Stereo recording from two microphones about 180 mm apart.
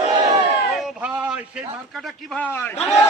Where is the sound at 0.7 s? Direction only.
5° right (ahead or behind); by 2.9 s 10° left (ahead or behind).